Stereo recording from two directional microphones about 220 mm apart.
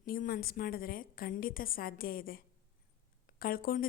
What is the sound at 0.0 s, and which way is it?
A woman's voice, 40° left (ahead or behind).